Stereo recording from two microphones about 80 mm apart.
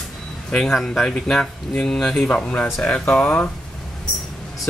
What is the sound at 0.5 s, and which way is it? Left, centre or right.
Speech, centre.